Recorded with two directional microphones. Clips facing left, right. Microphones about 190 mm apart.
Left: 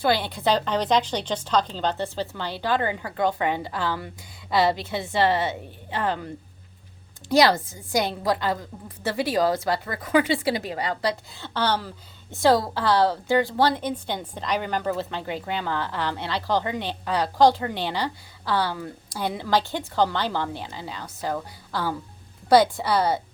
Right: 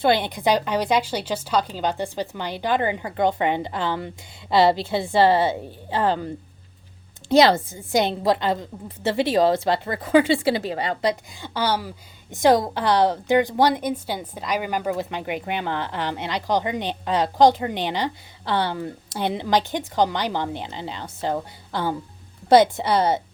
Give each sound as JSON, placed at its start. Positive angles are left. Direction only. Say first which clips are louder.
{"t": 0.0, "sound": "a woman's voice", "louder": "right 3 dB", "side_deg": -20}
{"t": 7.3, "sound": "a woman's voice", "louder": "right 3 dB", "side_deg": -25}